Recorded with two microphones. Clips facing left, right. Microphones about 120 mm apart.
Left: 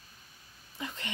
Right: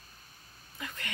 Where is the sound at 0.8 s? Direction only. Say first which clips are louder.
Left 2 dB; 25° left (ahead or behind).